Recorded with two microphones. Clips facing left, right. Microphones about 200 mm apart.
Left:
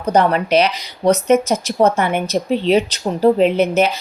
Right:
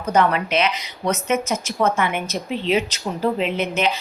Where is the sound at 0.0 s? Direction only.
35° left (ahead or behind).